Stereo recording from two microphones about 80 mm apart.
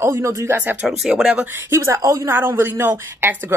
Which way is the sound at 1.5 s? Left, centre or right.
Right.